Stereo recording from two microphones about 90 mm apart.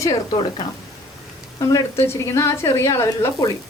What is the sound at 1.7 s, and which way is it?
A woman's voice, 30° left (ahead or behind).